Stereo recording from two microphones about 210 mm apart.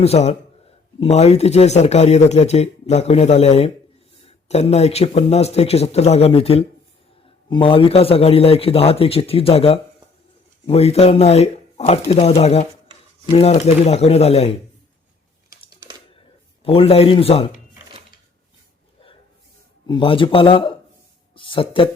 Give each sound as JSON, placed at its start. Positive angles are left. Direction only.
{"t": 0.0, "sound": "a man's voice", "side_deg": 30}
{"t": 16.6, "sound": "a man's voice", "side_deg": 25}
{"t": 19.9, "sound": "a man's voice", "side_deg": 25}
{"t": 21.3, "sound": "a sound", "side_deg": 25}